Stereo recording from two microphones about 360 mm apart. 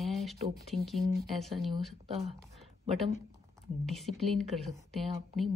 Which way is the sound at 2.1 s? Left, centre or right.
Centre.